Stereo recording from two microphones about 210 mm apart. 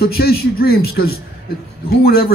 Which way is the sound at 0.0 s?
45° left (ahead or behind).